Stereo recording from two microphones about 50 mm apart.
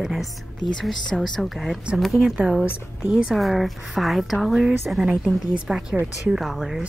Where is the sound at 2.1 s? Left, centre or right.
Centre.